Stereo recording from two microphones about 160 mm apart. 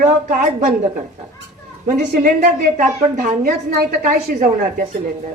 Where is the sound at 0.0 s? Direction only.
60° right (ahead or behind).